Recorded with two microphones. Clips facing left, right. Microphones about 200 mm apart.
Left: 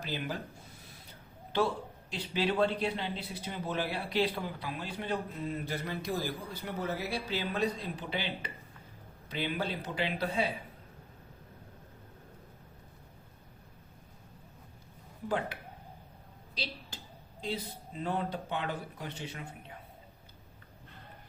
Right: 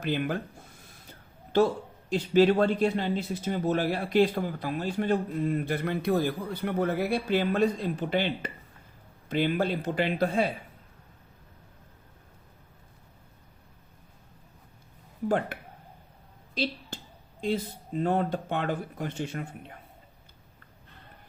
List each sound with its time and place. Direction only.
0.0 s speech: 55° right (ahead or behind)
1.5 s a man's voice: 45° right (ahead or behind)
15.3 s a man's voice: 50° right (ahead or behind)
16.9 s a sound: 50° right (ahead or behind)
17.4 s a man's voice: 50° right (ahead or behind)